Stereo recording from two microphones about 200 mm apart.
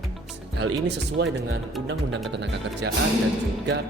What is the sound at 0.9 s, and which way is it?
Speech, 65° right (ahead or behind).